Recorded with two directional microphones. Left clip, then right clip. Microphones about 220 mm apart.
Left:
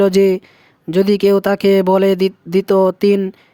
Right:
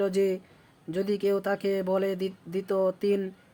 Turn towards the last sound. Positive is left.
turn(degrees=45)  # may be behind; listen again after turning